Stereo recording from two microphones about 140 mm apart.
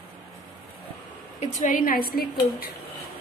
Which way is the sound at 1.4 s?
70° left (ahead or behind).